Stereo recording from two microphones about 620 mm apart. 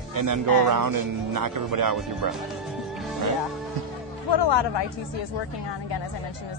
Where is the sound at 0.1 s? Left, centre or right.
Right.